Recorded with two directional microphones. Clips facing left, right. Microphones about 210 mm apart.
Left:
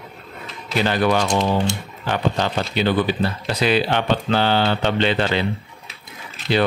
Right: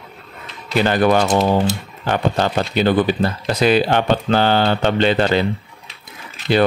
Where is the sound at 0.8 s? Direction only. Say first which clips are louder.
Right 4 dB; 50° right (ahead or behind).